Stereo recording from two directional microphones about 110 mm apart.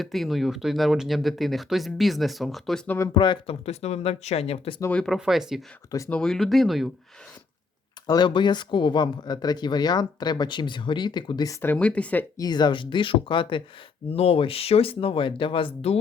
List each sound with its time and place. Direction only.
0.0 s speech: centre (ahead or behind)
3.2 s speech: 50° left (ahead or behind)
4.9 s speech: 10° left (ahead or behind)
5.1 s speech: 5° right (ahead or behind)
6.1 s speech: 5° left (ahead or behind)
8.0 s speech: 40° left (ahead or behind)
11.6 s speech: 15° left (ahead or behind)
12.4 s speech: 40° left (ahead or behind)
14.1 s speech: 60° left (ahead or behind)